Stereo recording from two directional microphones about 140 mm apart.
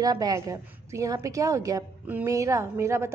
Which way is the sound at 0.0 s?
25° right (ahead or behind).